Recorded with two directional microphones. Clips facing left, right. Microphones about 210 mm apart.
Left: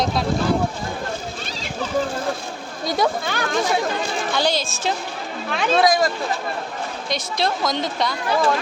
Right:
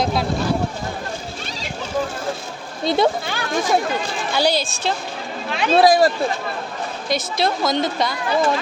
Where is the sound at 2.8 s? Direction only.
25° right (ahead or behind).